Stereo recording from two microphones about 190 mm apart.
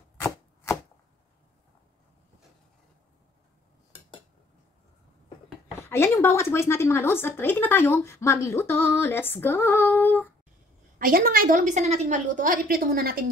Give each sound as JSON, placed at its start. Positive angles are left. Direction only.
{"t": 5.8, "sound": "speech", "side_deg": 15}
{"t": 11.0, "sound": "a woman's voice", "side_deg": -50}